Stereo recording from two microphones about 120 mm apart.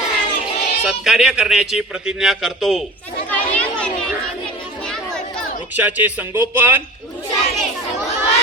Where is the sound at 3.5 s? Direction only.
10° left (ahead or behind).